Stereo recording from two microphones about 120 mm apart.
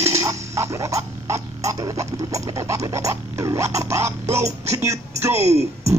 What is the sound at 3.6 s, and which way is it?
Music, 25° right (ahead or behind).